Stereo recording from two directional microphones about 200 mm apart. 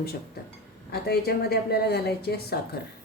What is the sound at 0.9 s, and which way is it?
A woman's voice, 50° left (ahead or behind).